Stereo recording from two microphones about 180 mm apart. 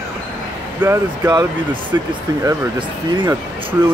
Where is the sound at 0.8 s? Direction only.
15° right (ahead or behind).